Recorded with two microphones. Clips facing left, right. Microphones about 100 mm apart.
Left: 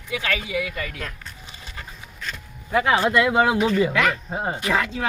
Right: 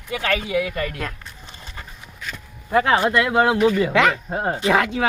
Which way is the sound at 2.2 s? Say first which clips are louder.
Even; 5° right (ahead or behind).